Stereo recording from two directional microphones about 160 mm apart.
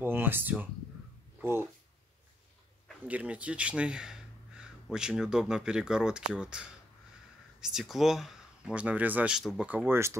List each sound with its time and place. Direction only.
0.0 s speech: 15° right (ahead or behind)
3.1 s speech: 10° right (ahead or behind)
9.7 s speech: 10° right (ahead or behind)